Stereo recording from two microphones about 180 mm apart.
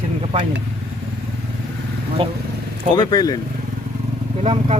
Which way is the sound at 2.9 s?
20° left (ahead or behind).